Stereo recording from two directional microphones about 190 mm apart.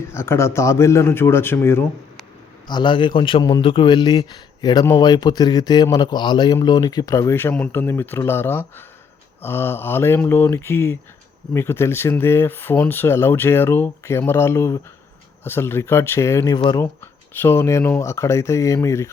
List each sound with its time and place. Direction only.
0.0 s speech: 15° left (ahead or behind)
2.6 s a man's voice: 25° left (ahead or behind)
16.8 s speech: 10° left (ahead or behind)